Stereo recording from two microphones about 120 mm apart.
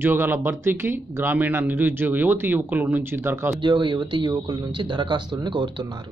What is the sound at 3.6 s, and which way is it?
Speech, 40° right (ahead or behind).